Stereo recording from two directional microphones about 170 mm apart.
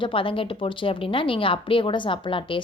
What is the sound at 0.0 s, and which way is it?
A woman's voice, 30° left (ahead or behind).